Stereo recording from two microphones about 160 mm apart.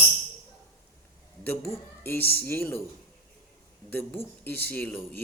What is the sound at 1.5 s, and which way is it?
Speech, 15° left (ahead or behind).